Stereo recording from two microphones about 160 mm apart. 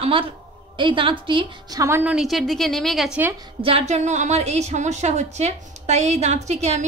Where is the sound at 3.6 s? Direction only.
40° right (ahead or behind).